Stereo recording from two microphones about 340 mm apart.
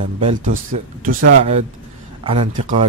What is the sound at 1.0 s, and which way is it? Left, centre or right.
Speech, right.